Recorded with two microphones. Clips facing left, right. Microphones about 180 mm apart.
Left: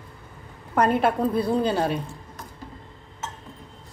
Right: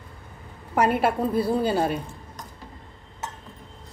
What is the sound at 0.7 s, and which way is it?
A woman's voice, 10° right (ahead or behind).